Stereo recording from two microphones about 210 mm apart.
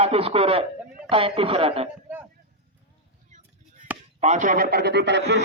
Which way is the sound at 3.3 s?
35° right (ahead or behind).